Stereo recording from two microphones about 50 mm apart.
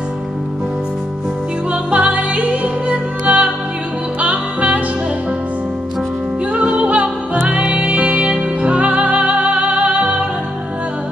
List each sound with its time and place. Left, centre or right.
1.7 s music: right
6.5 s music: right